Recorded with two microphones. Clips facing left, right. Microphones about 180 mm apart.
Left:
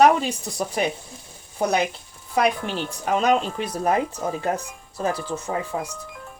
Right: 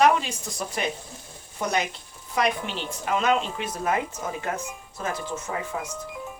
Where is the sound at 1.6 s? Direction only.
35° left (ahead or behind).